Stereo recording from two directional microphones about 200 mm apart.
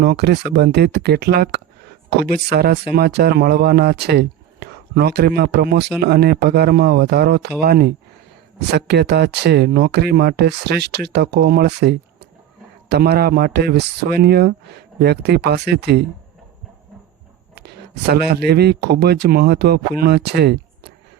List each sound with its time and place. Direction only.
0.0 s speech: 55° right (ahead or behind)
17.6 s speech: 55° right (ahead or behind)